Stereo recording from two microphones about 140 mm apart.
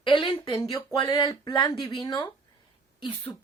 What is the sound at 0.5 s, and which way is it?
Speech, 25° left (ahead or behind).